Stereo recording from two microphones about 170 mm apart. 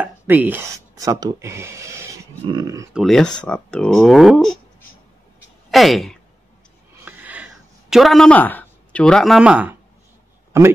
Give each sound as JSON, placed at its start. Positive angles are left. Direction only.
{"t": 0.0, "sound": "speech", "side_deg": -10}
{"t": 2.9, "sound": "speech", "side_deg": 0}
{"t": 5.7, "sound": "speech", "side_deg": 0}
{"t": 7.1, "sound": "a sound", "side_deg": -10}